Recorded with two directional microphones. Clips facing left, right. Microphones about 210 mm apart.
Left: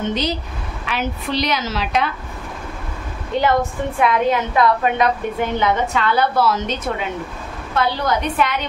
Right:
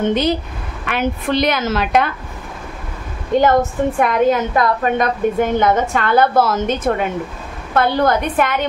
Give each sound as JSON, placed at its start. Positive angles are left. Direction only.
{"t": 0.1, "sound": "a woman's voice", "side_deg": -55}
{"t": 3.3, "sound": "a woman's voice", "side_deg": -45}